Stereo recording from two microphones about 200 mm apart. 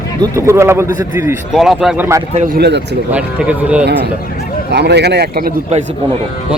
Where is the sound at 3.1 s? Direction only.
5° right (ahead or behind).